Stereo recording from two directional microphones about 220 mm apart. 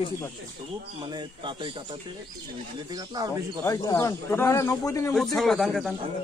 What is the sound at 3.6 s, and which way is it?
Speech, 15° left (ahead or behind).